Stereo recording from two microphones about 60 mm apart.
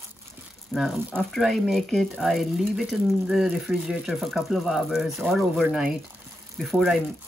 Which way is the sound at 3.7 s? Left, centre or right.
Centre.